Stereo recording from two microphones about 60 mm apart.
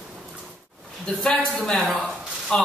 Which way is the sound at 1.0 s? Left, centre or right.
Centre.